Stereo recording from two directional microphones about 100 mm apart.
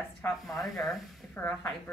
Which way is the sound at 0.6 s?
Centre (ahead or behind).